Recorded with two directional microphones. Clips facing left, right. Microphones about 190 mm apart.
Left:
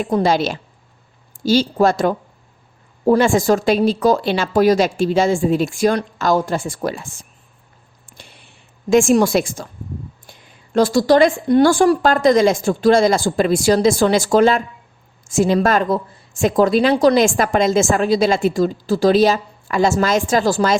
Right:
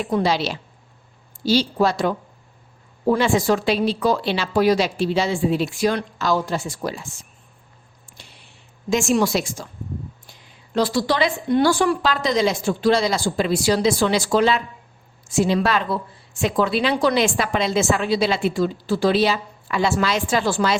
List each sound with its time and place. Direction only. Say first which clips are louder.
0.0 s a woman's voice: left 4 dB; 45° left (ahead or behind)
8.9 s a woman's voice: left 6 dB; 50° left (ahead or behind)
10.8 s a woman's voice: left 7 dB; 45° left (ahead or behind)